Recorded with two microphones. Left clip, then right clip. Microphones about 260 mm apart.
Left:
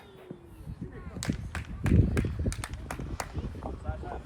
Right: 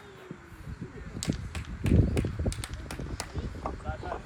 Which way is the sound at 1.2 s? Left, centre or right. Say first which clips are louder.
Even; centre.